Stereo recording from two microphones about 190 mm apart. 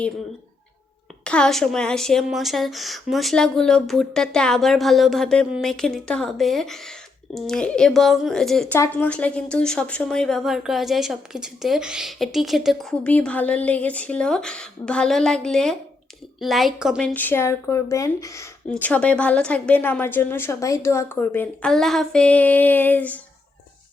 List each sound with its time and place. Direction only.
1.2 s a woman's voice: 5° left (ahead or behind)